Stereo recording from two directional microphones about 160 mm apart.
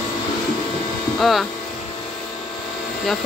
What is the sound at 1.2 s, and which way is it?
Speech, centre (ahead or behind).